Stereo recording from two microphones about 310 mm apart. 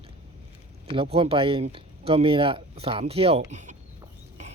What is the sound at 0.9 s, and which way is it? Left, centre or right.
Speech, centre.